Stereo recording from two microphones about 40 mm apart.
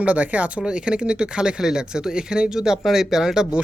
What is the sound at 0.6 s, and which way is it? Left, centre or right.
Speech, right.